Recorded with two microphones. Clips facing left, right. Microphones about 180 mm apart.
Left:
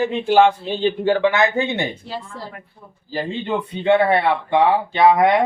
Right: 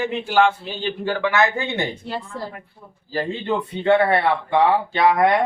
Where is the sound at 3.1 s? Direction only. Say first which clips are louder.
Even; 15° left (ahead or behind).